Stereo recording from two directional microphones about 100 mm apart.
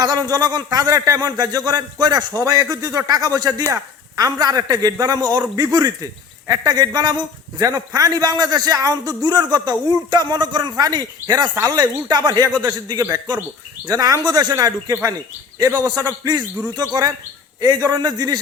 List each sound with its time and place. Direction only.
0.0 s a man's voice: 40° right (ahead or behind)
13.8 s a man's voice: 35° right (ahead or behind)